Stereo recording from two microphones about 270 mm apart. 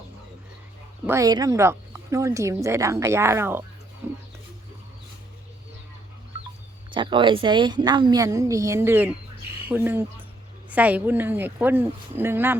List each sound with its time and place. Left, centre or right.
1.0 s speech: centre
6.9 s speech: centre